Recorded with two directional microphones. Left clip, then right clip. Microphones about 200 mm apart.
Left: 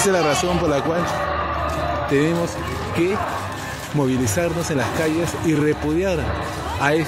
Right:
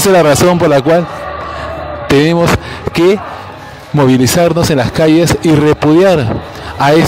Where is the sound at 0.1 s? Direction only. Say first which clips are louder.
Right 11 dB; 40° right (ahead or behind).